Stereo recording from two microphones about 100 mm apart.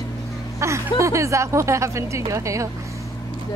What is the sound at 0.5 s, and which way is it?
Speech, 30° right (ahead or behind).